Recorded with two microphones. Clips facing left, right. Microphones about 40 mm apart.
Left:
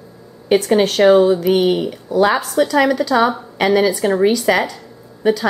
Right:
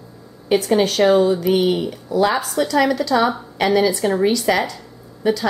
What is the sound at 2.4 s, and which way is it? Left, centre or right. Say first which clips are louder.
A woman's voice: left 3 dB; centre.